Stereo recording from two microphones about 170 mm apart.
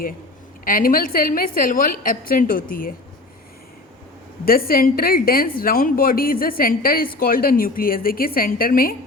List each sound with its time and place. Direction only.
0.6 s a woman's voice: 55° left (ahead or behind)
4.4 s a woman's voice: 60° left (ahead or behind)